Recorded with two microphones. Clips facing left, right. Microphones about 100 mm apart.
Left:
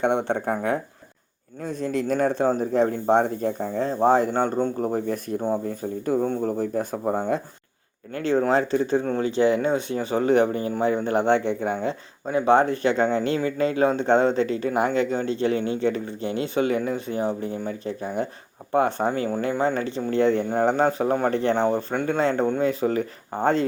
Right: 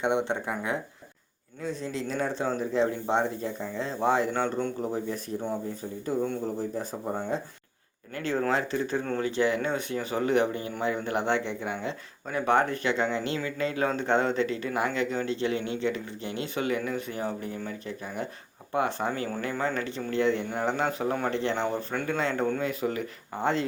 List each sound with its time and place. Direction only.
0.0 s speech: 50° left (ahead or behind); by 4.7 s 35° left (ahead or behind)
4.8 s speech: 50° left (ahead or behind)
5.6 s speech: 55° left (ahead or behind)
8.3 s speech: 25° left (ahead or behind)
12.3 s speech: 25° left (ahead or behind); by 23.6 s 45° left (ahead or behind)